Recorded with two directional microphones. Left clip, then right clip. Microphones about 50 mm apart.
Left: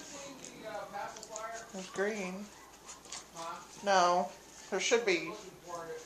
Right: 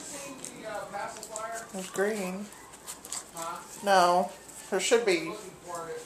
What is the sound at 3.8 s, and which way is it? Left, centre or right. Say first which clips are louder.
Speech: right 5 dB; right.